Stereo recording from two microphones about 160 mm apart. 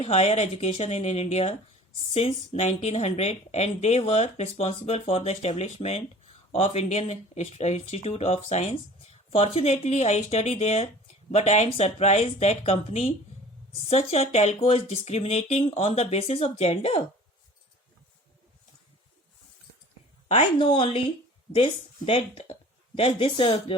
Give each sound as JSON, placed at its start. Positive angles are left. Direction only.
{"t": 0.0, "sound": "speech", "side_deg": 40}
{"t": 20.2, "sound": "speech", "side_deg": 35}